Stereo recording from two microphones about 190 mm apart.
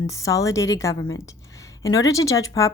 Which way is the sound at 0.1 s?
15° left (ahead or behind).